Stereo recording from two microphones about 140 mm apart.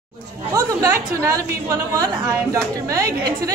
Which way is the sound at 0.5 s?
20° right (ahead or behind).